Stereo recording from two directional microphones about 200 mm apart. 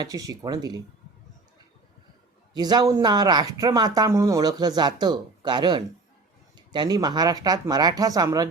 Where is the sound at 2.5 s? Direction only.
20° right (ahead or behind).